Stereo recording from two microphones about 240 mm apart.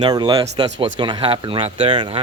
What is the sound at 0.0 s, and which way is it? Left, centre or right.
Speech, centre.